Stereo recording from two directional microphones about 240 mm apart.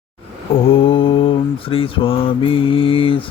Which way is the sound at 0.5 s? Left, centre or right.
Left.